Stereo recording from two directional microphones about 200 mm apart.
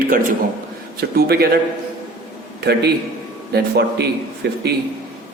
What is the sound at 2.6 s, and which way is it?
A man's voice, 55° right (ahead or behind).